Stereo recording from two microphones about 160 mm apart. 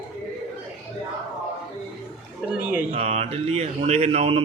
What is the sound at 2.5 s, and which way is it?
Speech, 10° right (ahead or behind).